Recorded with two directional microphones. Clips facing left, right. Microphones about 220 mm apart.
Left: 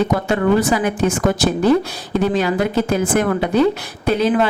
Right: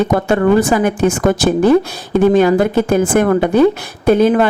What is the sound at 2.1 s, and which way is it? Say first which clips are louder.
A woman's voice: right 7 dB; 50° right (ahead or behind).